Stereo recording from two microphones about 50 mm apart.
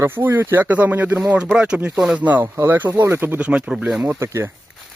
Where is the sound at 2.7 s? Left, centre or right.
Right.